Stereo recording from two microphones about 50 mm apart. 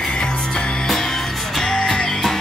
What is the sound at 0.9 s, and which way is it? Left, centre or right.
Music, centre.